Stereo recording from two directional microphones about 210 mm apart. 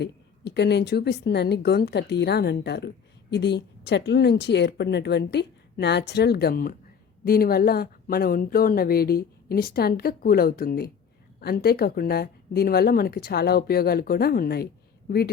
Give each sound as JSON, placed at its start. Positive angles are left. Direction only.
{"t": 0.0, "sound": "a woman's voice", "side_deg": 55}